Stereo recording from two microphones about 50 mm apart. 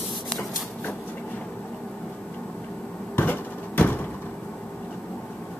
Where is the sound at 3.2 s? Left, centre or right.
Left.